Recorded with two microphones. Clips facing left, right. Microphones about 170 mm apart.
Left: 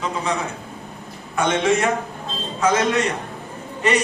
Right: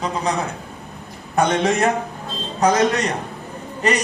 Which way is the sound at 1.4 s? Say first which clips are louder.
Right 1 dB; 35° right (ahead or behind).